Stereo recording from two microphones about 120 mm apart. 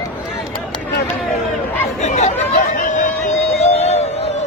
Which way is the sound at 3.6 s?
60° left (ahead or behind).